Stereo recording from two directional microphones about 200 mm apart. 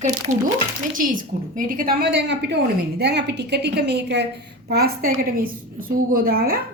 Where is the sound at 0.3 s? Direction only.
40° right (ahead or behind).